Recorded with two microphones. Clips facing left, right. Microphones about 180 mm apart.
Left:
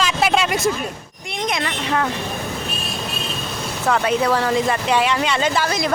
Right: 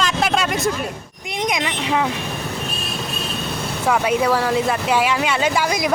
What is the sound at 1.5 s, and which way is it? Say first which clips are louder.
Speech: even; 10° right (ahead or behind).